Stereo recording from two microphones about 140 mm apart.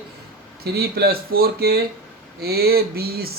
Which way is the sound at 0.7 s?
90° right.